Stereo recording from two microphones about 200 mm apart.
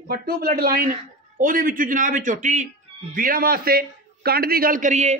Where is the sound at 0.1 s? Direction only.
50° right (ahead or behind).